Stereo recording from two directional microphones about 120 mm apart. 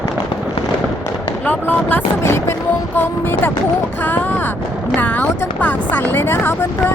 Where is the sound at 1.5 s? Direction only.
15° left (ahead or behind).